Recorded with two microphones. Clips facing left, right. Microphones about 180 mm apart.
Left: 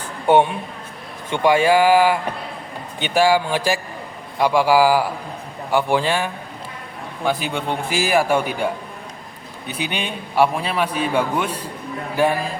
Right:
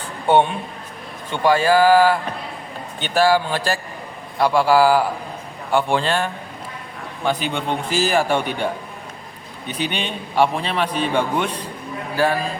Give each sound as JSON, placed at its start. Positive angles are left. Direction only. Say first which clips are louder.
{"t": 1.3, "sound": "a man's voice", "louder": "left 1 dB", "side_deg": 15}
{"t": 12.1, "sound": "speech", "louder": "left 1 dB", "side_deg": 20}